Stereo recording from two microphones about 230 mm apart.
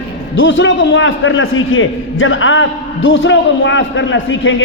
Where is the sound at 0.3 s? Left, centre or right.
Left.